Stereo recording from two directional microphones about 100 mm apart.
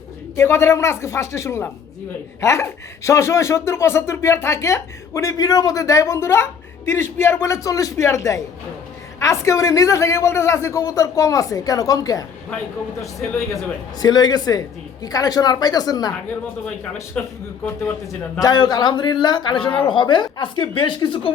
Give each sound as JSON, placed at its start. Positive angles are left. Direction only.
{"t": 0.3, "sound": "a man's voice", "side_deg": 25}
{"t": 14.0, "sound": "a man's voice", "side_deg": 45}
{"t": 17.2, "sound": "speech", "side_deg": 10}
{"t": 18.3, "sound": "a man's voice", "side_deg": 40}